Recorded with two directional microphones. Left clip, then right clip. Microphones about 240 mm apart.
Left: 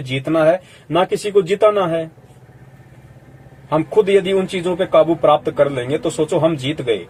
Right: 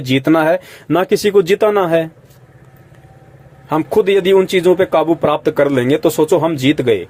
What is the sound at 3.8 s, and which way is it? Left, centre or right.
Speech, right.